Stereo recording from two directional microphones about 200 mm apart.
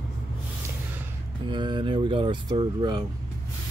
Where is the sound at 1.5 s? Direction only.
25° right (ahead or behind).